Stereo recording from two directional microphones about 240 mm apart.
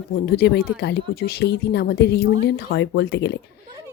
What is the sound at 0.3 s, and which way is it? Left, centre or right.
Speech, left.